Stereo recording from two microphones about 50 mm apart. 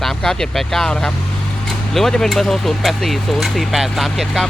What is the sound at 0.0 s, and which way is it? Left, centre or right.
Speech, centre.